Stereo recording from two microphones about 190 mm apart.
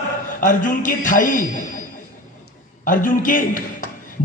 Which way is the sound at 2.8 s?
45° left (ahead or behind).